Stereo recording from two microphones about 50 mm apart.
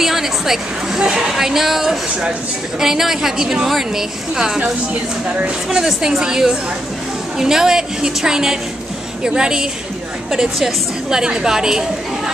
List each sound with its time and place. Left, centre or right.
0.0 s a woman's voice: centre
1.3 s a woman's voice: centre
5.7 s a woman's voice: centre